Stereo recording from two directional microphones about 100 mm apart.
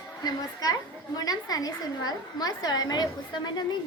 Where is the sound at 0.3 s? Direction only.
40° left (ahead or behind).